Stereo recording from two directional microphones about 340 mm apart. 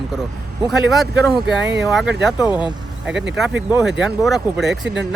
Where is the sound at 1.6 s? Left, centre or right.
Right.